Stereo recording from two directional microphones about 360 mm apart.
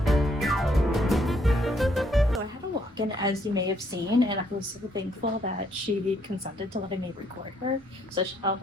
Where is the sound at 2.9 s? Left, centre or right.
Centre.